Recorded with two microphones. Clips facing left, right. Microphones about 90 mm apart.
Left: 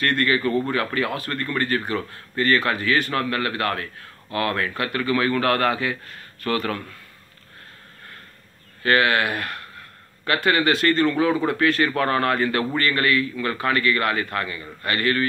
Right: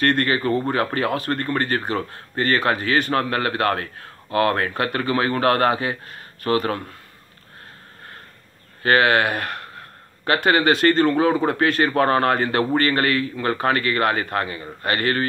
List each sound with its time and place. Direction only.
0.1 s speech: 35° right (ahead or behind)
8.8 s speech: 30° right (ahead or behind)